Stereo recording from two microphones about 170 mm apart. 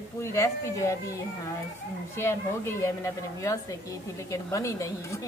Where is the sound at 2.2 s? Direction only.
15° left (ahead or behind).